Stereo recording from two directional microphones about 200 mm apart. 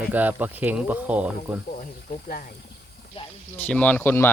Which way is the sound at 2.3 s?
45° left (ahead or behind).